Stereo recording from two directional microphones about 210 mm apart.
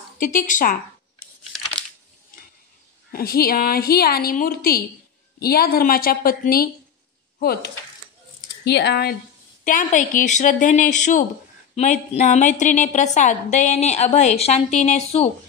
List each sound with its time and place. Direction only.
0.2 s a woman's voice: 40° left (ahead or behind)
1.5 s a sound: centre (ahead or behind)
3.1 s a woman's voice: 45° left (ahead or behind)
9.7 s a woman's voice: 40° left (ahead or behind)